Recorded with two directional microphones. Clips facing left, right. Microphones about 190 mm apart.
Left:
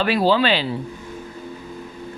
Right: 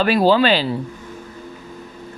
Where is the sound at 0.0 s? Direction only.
45° right (ahead or behind).